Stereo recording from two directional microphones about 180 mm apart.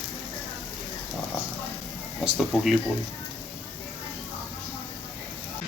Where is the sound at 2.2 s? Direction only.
Centre (ahead or behind).